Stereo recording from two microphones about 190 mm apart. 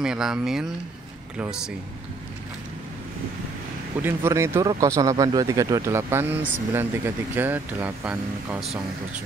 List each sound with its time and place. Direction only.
0.0 s speech: 5° right (ahead or behind)
4.0 s speech: 15° right (ahead or behind)